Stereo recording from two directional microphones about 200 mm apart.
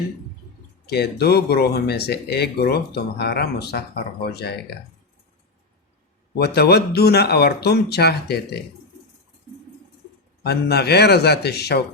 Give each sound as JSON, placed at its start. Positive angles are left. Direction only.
{"t": 0.9, "sound": "speech", "side_deg": 55}
{"t": 6.4, "sound": "speech", "side_deg": 55}
{"t": 10.4, "sound": "speech", "side_deg": 55}